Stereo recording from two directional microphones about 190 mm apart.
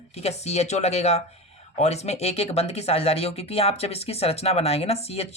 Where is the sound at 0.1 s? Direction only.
35° left (ahead or behind).